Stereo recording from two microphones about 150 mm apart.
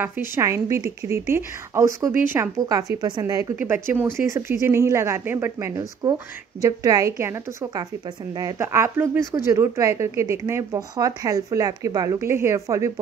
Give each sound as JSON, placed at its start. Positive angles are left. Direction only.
{"t": 0.0, "sound": "speech", "side_deg": -20}
{"t": 2.6, "sound": "speech", "side_deg": -25}